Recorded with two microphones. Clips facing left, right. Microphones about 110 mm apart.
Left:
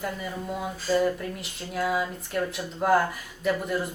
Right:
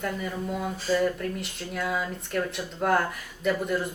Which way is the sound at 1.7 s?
5° left (ahead or behind).